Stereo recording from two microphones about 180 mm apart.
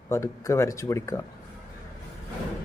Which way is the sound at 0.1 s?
15° left (ahead or behind).